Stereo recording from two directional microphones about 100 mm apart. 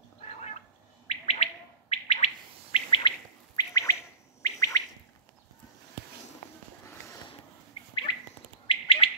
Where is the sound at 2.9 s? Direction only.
55° left (ahead or behind).